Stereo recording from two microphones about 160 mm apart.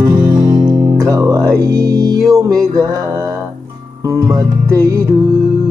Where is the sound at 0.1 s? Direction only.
20° right (ahead or behind).